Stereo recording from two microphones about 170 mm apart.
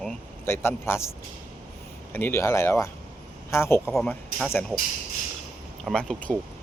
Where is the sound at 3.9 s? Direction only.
5° left (ahead or behind).